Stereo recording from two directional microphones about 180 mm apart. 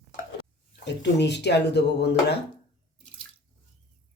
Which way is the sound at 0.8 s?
75° left (ahead or behind).